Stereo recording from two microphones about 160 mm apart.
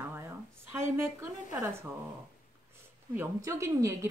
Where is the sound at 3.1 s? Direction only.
20° right (ahead or behind).